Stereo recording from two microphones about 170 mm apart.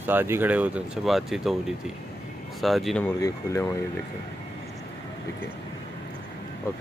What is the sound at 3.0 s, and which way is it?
Speech, 20° left (ahead or behind).